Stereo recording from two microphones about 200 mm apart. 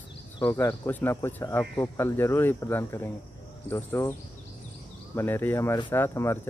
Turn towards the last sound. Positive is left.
turn(degrees=15)  # may be behind; listen again after turning